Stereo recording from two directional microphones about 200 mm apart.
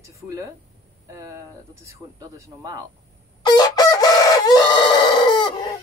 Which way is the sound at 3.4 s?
20° left (ahead or behind).